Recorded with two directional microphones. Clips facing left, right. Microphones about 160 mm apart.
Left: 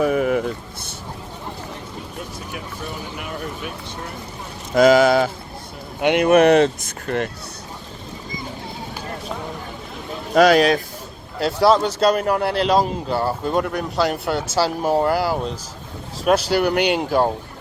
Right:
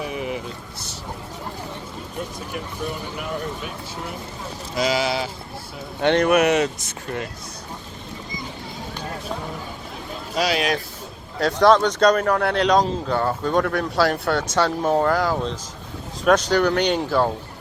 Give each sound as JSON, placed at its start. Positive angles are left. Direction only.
{"t": 0.0, "sound": "vehicle", "side_deg": 50}
{"t": 3.2, "sound": "speech", "side_deg": 0}
{"t": 4.7, "sound": "speech", "side_deg": 50}
{"t": 6.0, "sound": "speech", "side_deg": 15}
{"t": 6.2, "sound": "speech", "side_deg": 35}
{"t": 10.3, "sound": "speech", "side_deg": 50}
{"t": 11.3, "sound": "speech", "side_deg": 5}
{"t": 13.1, "sound": "speech", "side_deg": 30}
{"t": 13.5, "sound": "speech", "side_deg": 5}